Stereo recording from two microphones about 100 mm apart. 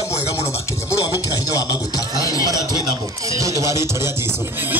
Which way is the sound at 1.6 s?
40° left (ahead or behind).